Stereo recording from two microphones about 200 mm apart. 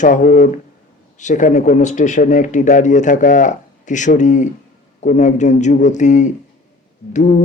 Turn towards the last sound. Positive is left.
turn(degrees=35)  # may be behind; listen again after turning